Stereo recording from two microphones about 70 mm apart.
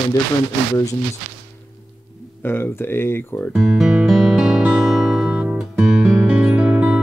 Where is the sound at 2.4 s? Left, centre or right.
Left.